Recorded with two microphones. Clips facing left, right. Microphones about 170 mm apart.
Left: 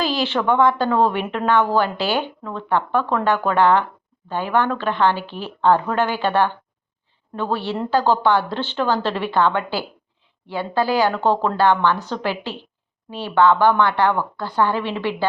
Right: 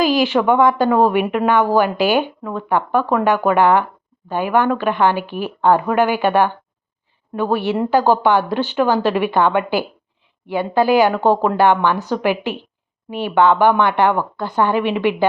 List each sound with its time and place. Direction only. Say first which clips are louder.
0.0 s speech: right 6 dB; 15° right (ahead or behind)